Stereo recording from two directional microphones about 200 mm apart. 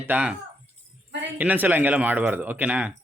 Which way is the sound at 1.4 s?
10° right (ahead or behind).